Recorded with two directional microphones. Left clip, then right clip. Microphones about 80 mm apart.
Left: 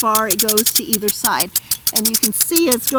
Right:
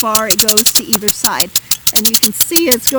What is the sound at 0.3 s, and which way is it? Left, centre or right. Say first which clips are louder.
Speech: right 5 dB; right.